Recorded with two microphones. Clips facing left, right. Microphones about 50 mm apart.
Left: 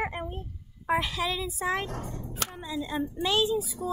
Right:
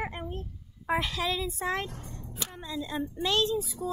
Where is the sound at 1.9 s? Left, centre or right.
Left.